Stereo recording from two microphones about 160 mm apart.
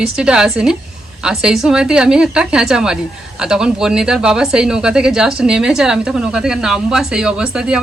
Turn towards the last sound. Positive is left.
turn(degrees=-5)  # may be behind; listen again after turning